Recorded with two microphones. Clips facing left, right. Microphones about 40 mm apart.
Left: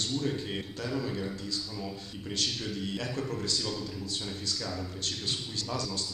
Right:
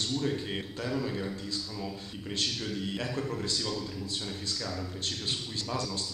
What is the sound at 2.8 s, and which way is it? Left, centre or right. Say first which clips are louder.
Speech: right 1 dB; centre.